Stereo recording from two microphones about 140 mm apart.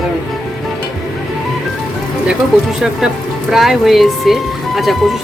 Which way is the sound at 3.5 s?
Centre (ahead or behind).